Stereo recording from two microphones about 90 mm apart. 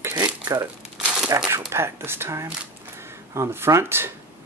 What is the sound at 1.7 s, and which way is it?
Speech, 30° right (ahead or behind).